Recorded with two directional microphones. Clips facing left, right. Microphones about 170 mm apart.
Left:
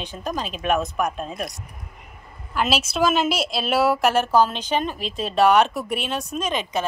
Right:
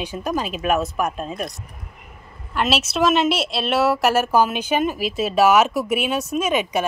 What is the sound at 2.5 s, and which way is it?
A woman's voice, centre (ahead or behind).